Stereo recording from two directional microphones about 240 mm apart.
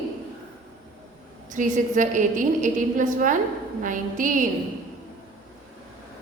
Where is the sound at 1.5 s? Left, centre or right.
Right.